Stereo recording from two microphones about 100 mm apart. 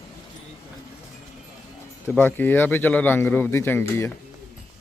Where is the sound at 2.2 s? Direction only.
20° left (ahead or behind).